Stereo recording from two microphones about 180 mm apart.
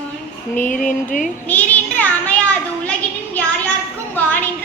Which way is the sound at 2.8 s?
5° left (ahead or behind).